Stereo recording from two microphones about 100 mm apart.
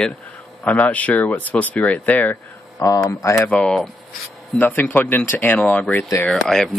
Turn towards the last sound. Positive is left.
turn(degrees=5)  # may be behind; listen again after turning